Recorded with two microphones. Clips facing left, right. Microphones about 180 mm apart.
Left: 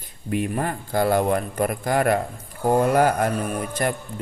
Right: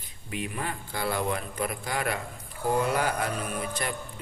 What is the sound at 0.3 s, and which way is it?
Speech, 50° left (ahead or behind).